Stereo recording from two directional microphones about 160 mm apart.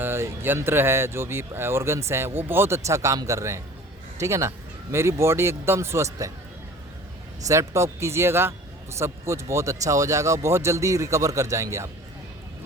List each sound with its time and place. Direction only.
0.0 s speech: 15° right (ahead or behind)
7.4 s speech: 20° right (ahead or behind)